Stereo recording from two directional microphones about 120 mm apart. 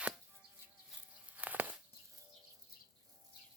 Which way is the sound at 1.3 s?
15° right (ahead or behind).